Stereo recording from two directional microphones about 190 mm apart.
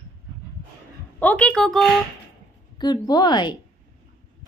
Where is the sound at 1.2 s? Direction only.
5° left (ahead or behind).